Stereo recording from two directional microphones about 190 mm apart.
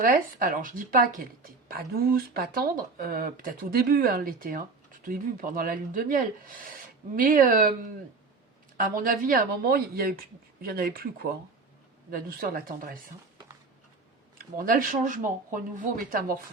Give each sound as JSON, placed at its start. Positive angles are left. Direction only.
{"t": 0.0, "sound": "a woman's voice", "side_deg": -50}
{"t": 8.8, "sound": "a woman's voice", "side_deg": -45}
{"t": 14.3, "sound": "a woman's voice", "side_deg": -45}